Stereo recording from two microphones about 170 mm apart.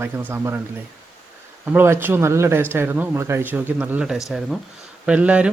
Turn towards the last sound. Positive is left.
turn(degrees=-5)  # may be behind; listen again after turning